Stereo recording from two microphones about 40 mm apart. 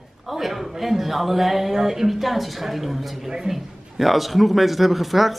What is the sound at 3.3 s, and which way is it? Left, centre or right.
Speech, centre.